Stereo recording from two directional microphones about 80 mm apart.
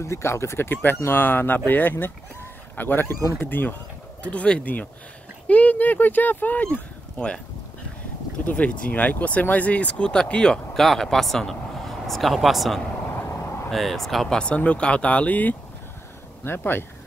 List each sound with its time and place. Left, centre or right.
0.0 s speech: left; by 7.3 s centre
8.5 s speech: centre